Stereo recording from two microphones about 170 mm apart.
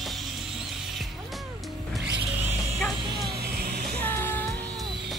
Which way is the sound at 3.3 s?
65° right (ahead or behind).